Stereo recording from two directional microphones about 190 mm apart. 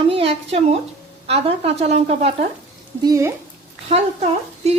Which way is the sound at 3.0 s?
15° right (ahead or behind).